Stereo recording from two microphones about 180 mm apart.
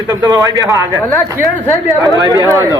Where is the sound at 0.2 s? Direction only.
20° right (ahead or behind).